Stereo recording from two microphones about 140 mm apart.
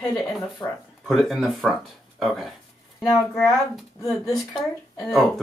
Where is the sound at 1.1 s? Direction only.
Centre (ahead or behind).